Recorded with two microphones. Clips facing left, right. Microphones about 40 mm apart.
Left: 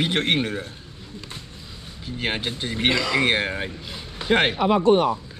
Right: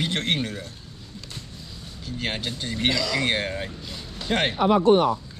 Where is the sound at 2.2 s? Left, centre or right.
Left.